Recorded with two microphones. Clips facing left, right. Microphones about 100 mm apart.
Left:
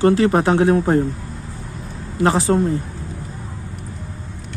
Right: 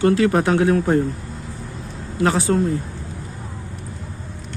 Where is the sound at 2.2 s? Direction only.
30° left (ahead or behind).